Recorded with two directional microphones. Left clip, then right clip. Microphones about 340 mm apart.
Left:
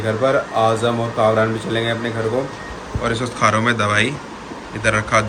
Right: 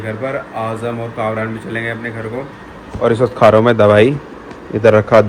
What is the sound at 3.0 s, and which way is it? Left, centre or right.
Speech, centre.